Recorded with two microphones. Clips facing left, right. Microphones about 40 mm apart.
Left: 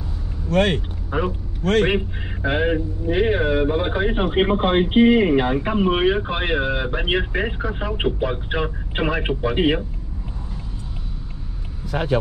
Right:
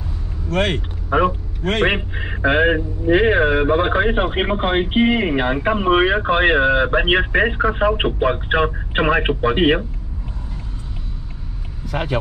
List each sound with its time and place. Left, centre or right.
0.6 s a man's voice: right
11.9 s speech: right